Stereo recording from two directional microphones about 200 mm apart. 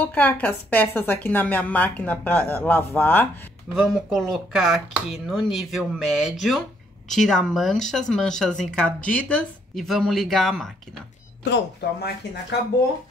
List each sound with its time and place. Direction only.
0.0 s a woman's voice: 10° left (ahead or behind)
11.5 s speech: 60° left (ahead or behind)